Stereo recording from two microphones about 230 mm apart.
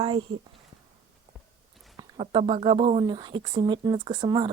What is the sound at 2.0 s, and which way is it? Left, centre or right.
Speech, right.